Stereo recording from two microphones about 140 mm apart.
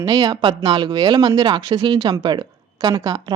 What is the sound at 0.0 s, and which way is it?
Speech, 25° right (ahead or behind).